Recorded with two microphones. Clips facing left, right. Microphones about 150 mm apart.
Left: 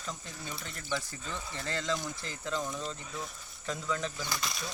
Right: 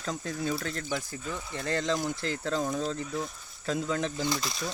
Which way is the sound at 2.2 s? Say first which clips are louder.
Right 10 dB; 90° right.